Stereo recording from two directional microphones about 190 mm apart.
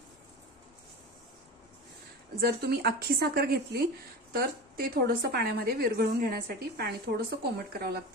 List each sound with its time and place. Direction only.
2.4 s speech: 55° right (ahead or behind)